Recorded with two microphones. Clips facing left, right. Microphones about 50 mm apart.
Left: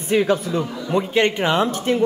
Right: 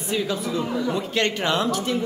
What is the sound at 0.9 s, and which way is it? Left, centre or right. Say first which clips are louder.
Speech: left 5 dB; left.